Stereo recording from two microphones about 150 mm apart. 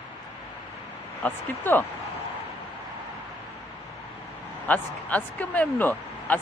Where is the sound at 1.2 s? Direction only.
10° left (ahead or behind).